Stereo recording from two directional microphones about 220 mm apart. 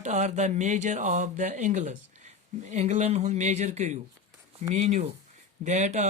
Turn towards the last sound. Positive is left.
turn(degrees=-30)  # may be behind; listen again after turning